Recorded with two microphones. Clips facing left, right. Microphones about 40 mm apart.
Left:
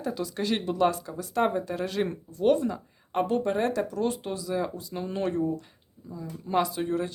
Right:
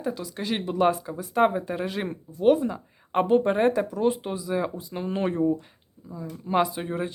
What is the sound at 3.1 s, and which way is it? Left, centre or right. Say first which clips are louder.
Speech: right 5 dB; right.